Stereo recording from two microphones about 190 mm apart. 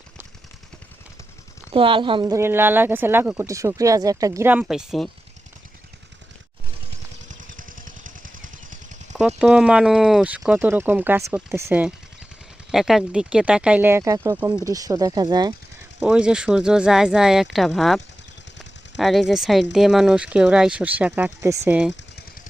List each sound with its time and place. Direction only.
1.7 s speech: 25° right (ahead or behind); by 5.0 s centre (ahead or behind)
7.3 s vehicle: 45° right (ahead or behind)
9.1 s speech: 5° right (ahead or behind); by 15.5 s 20° right (ahead or behind)
16.0 s speech: 5° right (ahead or behind)